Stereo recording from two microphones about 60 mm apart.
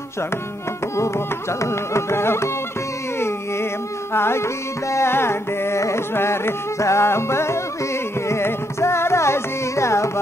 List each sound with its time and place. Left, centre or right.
0.9 s music: left
4.1 s music: left